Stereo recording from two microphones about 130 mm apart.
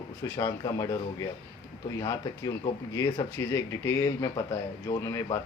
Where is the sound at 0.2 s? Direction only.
30° left (ahead or behind).